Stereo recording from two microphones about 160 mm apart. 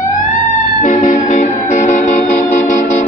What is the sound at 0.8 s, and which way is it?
Music, 50° left (ahead or behind).